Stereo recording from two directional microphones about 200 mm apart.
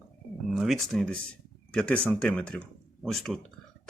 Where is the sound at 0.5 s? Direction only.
Centre (ahead or behind).